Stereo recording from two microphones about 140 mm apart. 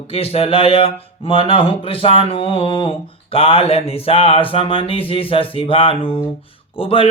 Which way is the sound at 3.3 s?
45° left (ahead or behind).